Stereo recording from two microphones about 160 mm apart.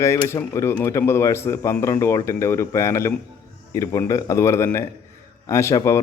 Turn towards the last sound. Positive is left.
turn(degrees=20)  # may be behind; listen again after turning